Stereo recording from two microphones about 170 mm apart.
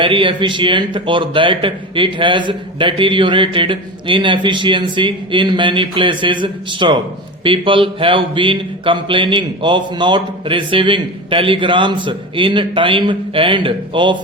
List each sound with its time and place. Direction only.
0.0 s speech: 30° right (ahead or behind)